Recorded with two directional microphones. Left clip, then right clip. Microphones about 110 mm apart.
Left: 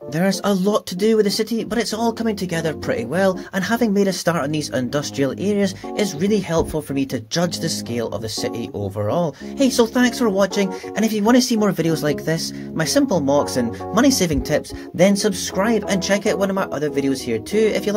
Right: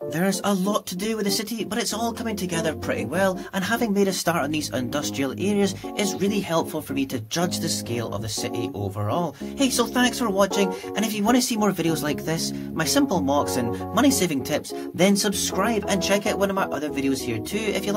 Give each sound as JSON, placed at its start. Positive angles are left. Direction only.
{"t": 0.1, "sound": "speech", "side_deg": 40}
{"t": 14.5, "sound": "speech", "side_deg": 25}